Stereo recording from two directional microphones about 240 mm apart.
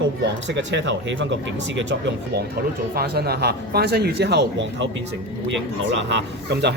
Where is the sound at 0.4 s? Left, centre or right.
Right.